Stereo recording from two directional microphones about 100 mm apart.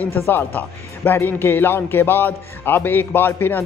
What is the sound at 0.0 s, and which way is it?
A man's voice, 20° left (ahead or behind).